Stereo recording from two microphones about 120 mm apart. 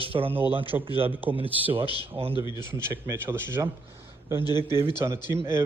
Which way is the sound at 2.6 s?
20° right (ahead or behind).